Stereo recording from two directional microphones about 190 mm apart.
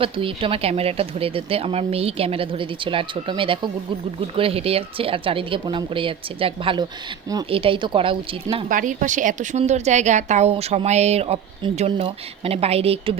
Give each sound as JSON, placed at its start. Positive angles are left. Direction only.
{"t": 0.0, "sound": "speech", "side_deg": -25}
{"t": 8.7, "sound": "a woman's voice", "side_deg": -45}